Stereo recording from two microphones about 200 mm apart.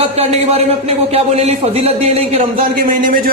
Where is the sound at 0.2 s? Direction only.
30° right (ahead or behind).